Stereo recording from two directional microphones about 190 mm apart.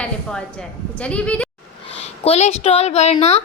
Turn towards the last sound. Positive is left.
turn(degrees=35)  # may be behind; listen again after turning